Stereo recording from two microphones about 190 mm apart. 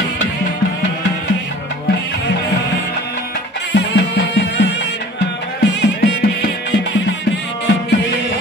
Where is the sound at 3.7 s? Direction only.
65° left (ahead or behind).